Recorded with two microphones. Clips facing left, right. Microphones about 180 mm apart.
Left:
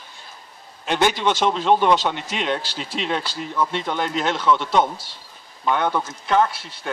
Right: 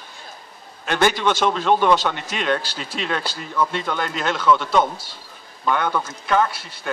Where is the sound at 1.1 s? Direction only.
20° left (ahead or behind).